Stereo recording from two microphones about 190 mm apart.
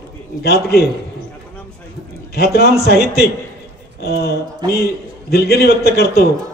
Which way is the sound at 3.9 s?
55° left (ahead or behind).